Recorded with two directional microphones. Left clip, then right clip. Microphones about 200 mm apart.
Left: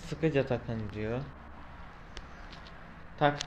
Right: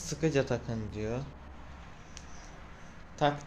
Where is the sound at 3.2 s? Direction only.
20° left (ahead or behind).